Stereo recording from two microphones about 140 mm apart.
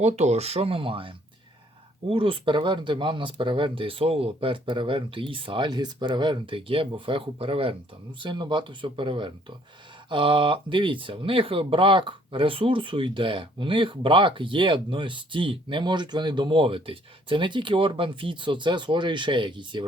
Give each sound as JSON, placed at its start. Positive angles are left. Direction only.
{"t": 0.0, "sound": "speech", "side_deg": -50}